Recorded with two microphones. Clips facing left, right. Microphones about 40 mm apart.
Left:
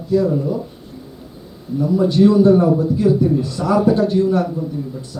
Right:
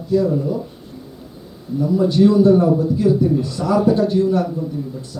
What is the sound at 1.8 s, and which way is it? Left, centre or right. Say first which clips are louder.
Speech: left 1 dB; centre.